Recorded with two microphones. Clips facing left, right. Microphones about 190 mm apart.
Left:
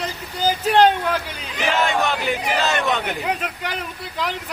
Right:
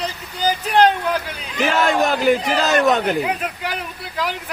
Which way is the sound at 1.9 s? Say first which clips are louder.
Right 6 dB; 35° right (ahead or behind).